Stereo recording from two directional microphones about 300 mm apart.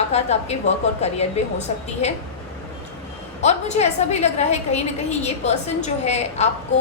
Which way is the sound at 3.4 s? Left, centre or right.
Left.